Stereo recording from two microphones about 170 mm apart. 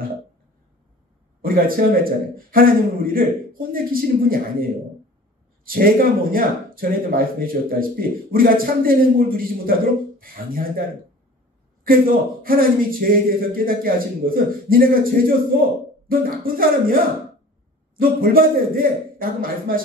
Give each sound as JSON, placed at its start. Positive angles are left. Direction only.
{"t": 1.4, "sound": "speech", "side_deg": -60}
{"t": 5.7, "sound": "speech", "side_deg": -60}
{"t": 11.8, "sound": "speech", "side_deg": -60}
{"t": 17.9, "sound": "speech", "side_deg": -55}